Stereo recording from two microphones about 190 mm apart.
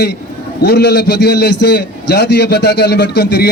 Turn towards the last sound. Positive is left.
turn(degrees=60)  # may be behind; listen again after turning